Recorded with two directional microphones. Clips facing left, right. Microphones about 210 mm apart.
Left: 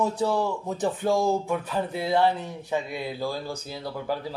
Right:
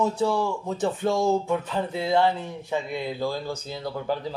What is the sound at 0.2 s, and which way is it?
A man's voice, 15° left (ahead or behind).